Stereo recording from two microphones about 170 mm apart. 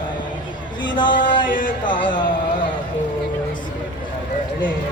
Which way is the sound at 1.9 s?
30° left (ahead or behind).